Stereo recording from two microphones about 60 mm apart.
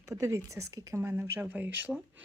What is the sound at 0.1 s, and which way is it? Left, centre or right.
Speech, right.